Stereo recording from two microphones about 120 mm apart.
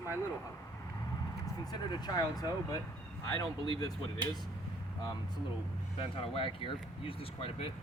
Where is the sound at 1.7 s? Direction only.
35° left (ahead or behind).